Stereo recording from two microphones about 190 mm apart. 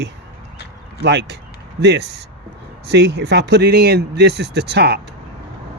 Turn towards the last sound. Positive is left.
turn(degrees=-60)  # may be behind; listen again after turning